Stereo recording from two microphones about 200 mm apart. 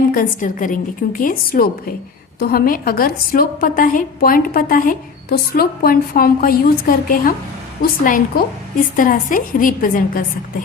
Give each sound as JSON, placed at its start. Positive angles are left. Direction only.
{"t": 0.1, "sound": "a woman's voice", "side_deg": 45}